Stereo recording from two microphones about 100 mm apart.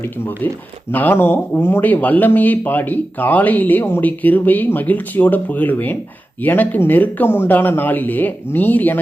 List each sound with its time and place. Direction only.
0.9 s speech: 20° left (ahead or behind)